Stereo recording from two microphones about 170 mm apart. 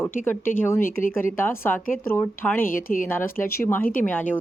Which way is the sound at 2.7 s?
55° left (ahead or behind).